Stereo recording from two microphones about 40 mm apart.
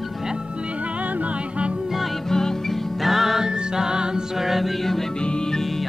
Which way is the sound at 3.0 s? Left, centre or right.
Centre.